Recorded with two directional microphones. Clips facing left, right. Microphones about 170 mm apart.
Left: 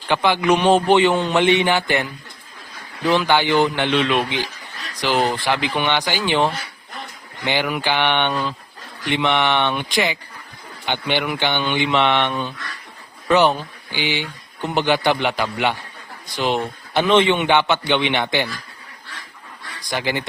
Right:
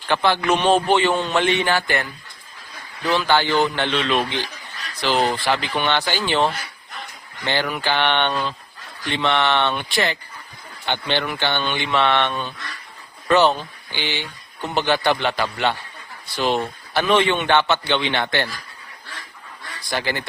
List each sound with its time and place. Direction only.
0.1 s speech: 15° left (ahead or behind)
3.1 s speech: 15° left (ahead or behind)
8.3 s speech: centre (ahead or behind)
9.0 s speech: 15° left (ahead or behind)
19.8 s speech: 15° left (ahead or behind)